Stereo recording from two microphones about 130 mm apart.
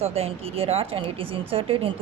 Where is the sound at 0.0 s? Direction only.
50° right (ahead or behind).